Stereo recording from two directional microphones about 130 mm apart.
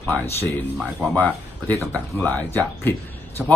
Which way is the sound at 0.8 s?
10° right (ahead or behind).